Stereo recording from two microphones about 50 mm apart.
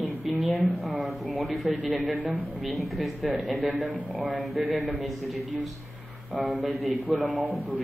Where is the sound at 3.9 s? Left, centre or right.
Right.